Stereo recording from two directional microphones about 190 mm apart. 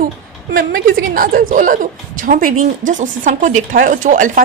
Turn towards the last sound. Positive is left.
turn(degrees=-40)  # may be behind; listen again after turning